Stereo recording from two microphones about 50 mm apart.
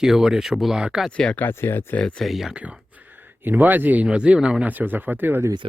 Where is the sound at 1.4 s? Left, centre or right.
Left.